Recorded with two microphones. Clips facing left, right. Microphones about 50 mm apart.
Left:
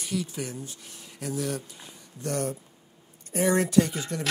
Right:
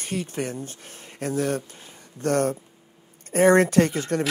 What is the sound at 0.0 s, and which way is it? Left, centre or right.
Speech, right.